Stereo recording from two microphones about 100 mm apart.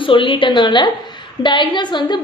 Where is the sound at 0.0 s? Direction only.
60° left (ahead or behind).